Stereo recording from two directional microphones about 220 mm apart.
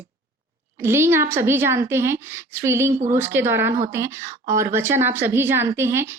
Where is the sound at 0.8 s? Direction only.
10° right (ahead or behind).